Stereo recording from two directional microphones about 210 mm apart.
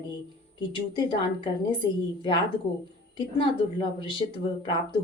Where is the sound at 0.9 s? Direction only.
25° left (ahead or behind).